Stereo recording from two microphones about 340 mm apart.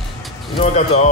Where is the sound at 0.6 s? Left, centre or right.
Centre.